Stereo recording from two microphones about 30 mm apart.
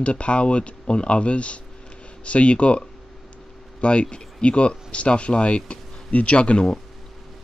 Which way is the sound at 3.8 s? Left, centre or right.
Left.